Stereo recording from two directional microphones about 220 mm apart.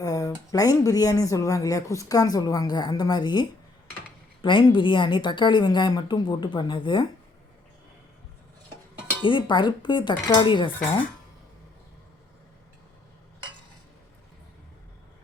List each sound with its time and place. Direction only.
0.0 s speech: 15° left (ahead or behind)
4.4 s a woman's voice: 20° left (ahead or behind)
9.2 s a woman's voice: 20° left (ahead or behind)